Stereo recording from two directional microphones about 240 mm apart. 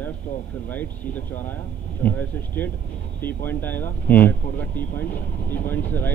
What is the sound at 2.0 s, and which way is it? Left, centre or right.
Speech, centre.